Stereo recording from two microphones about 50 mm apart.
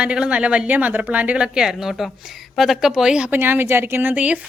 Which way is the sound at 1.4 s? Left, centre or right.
Centre.